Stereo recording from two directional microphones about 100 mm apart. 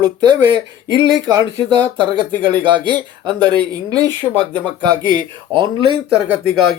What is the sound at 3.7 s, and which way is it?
Speech, 40° right (ahead or behind).